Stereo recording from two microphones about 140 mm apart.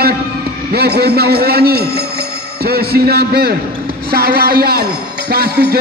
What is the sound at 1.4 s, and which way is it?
Speech, 90° right.